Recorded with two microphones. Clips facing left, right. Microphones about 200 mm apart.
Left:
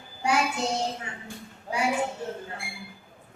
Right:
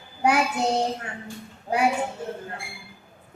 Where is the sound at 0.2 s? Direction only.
60° right (ahead or behind).